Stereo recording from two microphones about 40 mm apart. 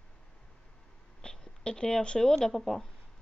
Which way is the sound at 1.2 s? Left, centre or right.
Centre.